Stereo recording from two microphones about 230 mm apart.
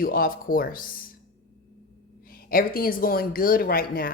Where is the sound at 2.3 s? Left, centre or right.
Left.